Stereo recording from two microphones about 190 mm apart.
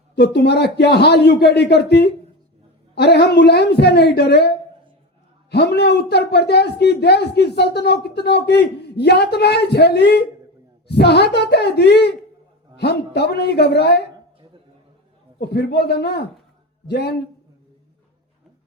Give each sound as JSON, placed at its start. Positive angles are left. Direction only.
{"t": 0.2, "sound": "a woman's voice", "side_deg": 60}
{"t": 15.4, "sound": "a woman's voice", "side_deg": 60}